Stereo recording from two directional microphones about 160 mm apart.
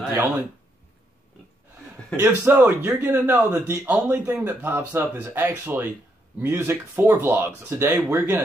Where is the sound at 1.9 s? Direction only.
10° right (ahead or behind).